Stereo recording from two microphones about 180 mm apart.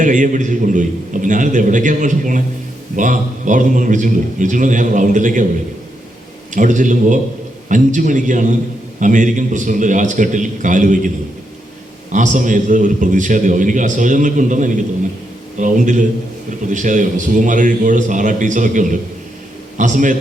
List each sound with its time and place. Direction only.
0.0 s a man's voice: 45° right (ahead or behind)
6.5 s a man's voice: 45° right (ahead or behind)
12.1 s a man's voice: 45° right (ahead or behind)